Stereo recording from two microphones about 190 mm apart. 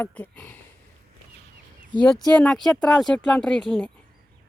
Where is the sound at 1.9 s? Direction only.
20° left (ahead or behind).